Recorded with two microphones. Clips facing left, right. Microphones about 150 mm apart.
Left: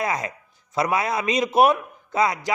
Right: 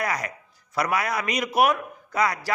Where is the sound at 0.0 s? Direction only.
25° left (ahead or behind).